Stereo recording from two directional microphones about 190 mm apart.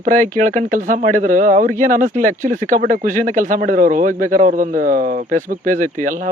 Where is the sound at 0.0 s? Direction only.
45° right (ahead or behind).